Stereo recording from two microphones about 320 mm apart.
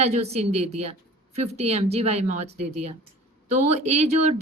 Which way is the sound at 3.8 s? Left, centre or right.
Right.